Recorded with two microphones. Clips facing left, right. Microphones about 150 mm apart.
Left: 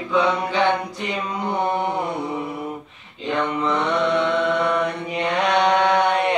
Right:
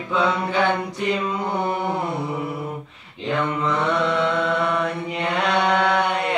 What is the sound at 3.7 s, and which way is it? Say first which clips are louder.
Mantra: left 2 dB; 15° left (ahead or behind).